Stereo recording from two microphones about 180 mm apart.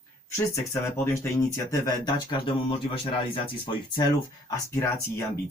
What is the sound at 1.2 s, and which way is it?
Speech, 20° left (ahead or behind).